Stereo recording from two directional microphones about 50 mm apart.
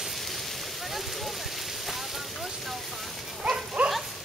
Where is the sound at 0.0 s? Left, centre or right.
Centre.